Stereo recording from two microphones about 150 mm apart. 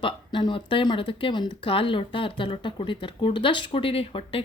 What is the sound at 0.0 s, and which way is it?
A woman's voice, 30° left (ahead or behind).